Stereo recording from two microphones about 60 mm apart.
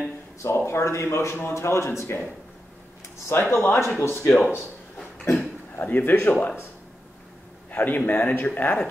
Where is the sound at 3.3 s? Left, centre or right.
Left.